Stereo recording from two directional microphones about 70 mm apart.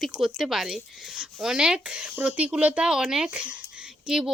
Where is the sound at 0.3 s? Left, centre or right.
Centre.